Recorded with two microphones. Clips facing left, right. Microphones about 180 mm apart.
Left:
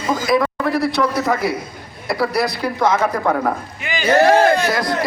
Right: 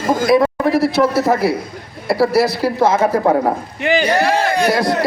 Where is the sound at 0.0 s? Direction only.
50° right (ahead or behind).